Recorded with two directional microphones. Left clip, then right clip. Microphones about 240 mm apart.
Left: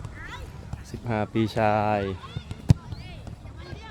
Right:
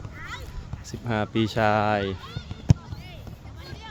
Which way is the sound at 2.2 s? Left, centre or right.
Right.